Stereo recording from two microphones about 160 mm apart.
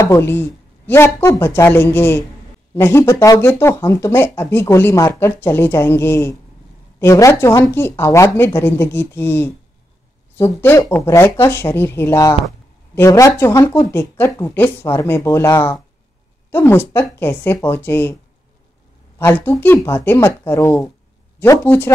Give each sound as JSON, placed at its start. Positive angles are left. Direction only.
{"t": 0.0, "sound": "speech", "side_deg": 15}
{"t": 19.1, "sound": "speech", "side_deg": 15}